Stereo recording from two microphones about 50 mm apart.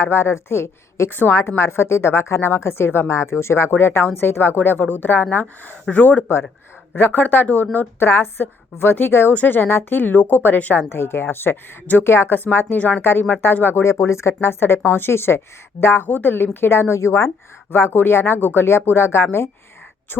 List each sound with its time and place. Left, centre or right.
0.0 s a woman's voice: left
7.9 s speech: left
9.3 s a woman's voice: left
10.9 s speech: left
14.4 s speech: left
16.0 s a woman's voice: left
16.3 s speech: left
17.7 s speech: left